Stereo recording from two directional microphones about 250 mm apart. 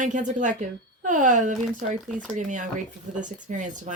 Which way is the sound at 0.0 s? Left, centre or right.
Right.